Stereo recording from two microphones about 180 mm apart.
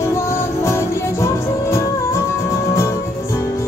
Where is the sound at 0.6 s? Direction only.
15° left (ahead or behind).